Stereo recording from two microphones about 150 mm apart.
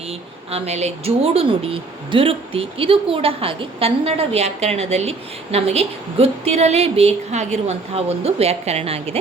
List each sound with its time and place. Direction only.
0.1 s speech: 45° right (ahead or behind)